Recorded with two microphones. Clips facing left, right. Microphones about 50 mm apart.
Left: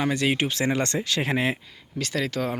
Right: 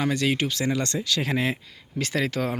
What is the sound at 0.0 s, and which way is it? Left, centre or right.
Speech, centre.